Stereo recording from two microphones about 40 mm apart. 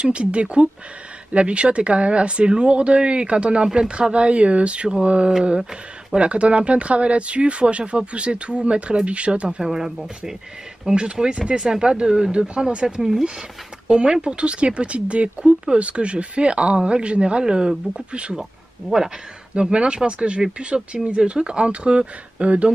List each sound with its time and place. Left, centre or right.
0.0 s speech: right
9.6 s speech: centre
13.8 s speech: right
18.4 s speech: centre
19.5 s speech: right